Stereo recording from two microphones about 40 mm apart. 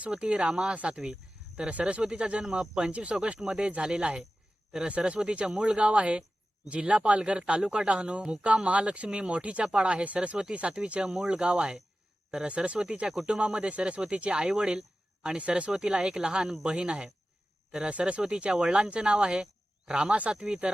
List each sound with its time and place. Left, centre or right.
0.1 s speech: right
0.5 s speech: centre
0.8 s speech: right
3.3 s speech: centre
4.8 s speech: right
15.4 s speech: right